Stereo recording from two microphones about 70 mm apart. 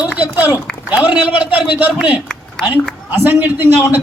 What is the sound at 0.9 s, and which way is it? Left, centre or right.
A man's voice, right.